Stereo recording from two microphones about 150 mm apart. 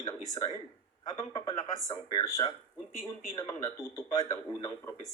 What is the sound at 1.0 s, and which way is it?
Speech, 25° left (ahead or behind).